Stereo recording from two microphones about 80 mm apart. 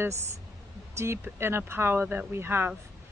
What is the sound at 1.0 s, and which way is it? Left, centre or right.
Speech, right.